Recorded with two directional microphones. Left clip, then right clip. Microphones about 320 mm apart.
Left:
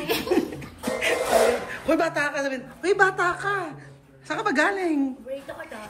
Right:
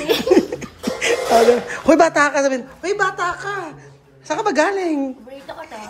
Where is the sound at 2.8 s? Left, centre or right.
Centre.